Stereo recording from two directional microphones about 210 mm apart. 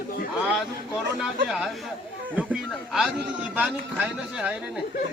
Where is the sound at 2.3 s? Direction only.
5° right (ahead or behind).